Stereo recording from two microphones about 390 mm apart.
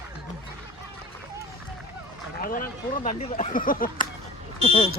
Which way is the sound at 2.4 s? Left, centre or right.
Left.